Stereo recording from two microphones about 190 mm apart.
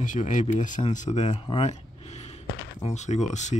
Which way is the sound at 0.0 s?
40° left (ahead or behind).